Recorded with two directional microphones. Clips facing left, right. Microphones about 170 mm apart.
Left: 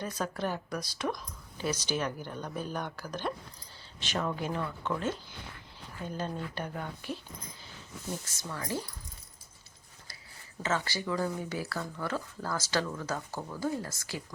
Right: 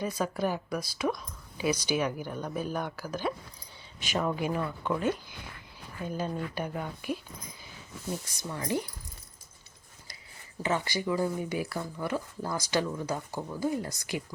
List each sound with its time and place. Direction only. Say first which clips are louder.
0.0 s speech: right 4 dB; 10° right (ahead or behind)
8.4 s speech: right 5 dB; 20° right (ahead or behind)
10.6 s speech: right 2 dB; 15° right (ahead or behind)